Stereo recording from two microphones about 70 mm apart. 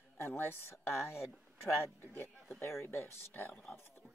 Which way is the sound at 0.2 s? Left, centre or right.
Left.